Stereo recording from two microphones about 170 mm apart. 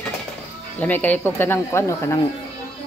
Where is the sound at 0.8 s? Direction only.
10° left (ahead or behind).